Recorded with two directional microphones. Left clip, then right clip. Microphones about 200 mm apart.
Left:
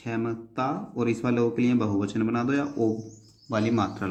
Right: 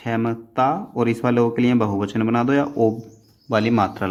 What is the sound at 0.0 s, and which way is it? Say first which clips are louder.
Speech: right 7 dB; 45° right (ahead or behind).